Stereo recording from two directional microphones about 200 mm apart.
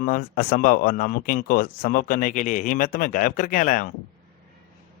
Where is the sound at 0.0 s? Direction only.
45° left (ahead or behind).